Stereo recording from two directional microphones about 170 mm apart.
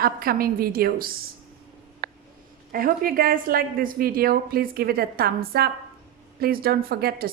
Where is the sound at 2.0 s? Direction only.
70° right (ahead or behind).